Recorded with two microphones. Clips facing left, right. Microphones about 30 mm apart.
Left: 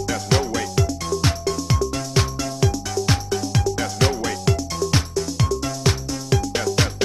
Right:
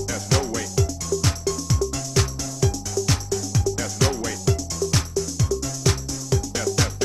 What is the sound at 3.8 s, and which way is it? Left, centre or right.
Music, left.